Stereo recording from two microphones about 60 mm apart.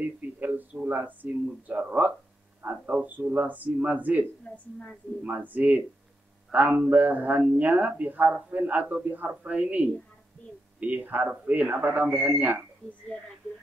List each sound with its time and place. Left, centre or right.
0.0 s a sound: right
0.8 s a man's voice: right
4.5 s a woman's voice: centre
5.2 s a man's voice: right
13.1 s speech: left